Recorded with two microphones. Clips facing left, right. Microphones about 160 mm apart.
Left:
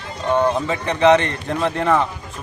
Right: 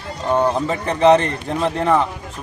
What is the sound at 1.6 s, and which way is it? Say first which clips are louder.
Speech: right 1 dB; centre (ahead or behind).